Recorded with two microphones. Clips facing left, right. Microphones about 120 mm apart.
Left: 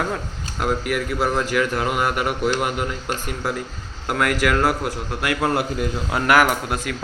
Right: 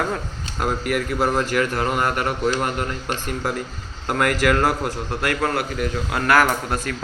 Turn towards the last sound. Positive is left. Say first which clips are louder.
# even
turn(degrees=10)  # may be behind; listen again after turning